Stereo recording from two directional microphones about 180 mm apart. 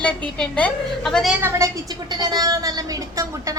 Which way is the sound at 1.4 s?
15° right (ahead or behind).